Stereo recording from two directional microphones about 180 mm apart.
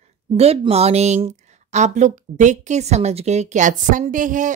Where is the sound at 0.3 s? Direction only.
35° right (ahead or behind).